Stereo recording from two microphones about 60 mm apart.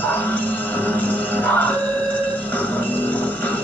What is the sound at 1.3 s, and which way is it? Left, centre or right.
Music, left.